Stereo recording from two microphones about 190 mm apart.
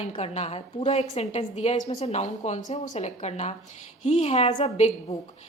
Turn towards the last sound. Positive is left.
turn(degrees=35)  # may be behind; listen again after turning